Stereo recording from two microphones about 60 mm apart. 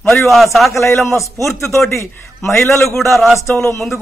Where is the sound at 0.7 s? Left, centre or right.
Left.